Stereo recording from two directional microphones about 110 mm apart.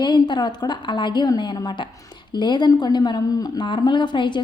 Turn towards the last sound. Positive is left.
turn(degrees=45)  # may be behind; listen again after turning